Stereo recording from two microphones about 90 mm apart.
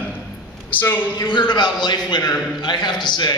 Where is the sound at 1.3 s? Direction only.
55° left (ahead or behind).